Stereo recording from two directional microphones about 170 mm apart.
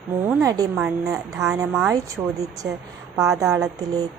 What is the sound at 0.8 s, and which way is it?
Speech, 10° right (ahead or behind).